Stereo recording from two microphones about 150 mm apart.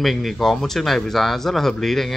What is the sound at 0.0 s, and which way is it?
Speech, centre (ahead or behind).